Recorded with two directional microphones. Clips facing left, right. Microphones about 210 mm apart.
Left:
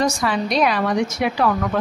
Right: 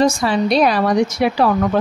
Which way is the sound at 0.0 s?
25° right (ahead or behind).